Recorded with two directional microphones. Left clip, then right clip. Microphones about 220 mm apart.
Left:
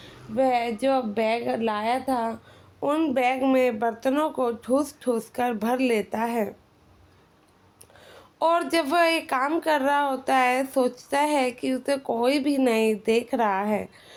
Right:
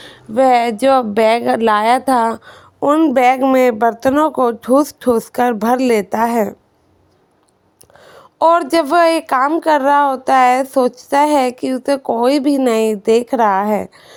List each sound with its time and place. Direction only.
0.0 s speech: 45° right (ahead or behind)
7.9 s a woman's voice: 35° right (ahead or behind)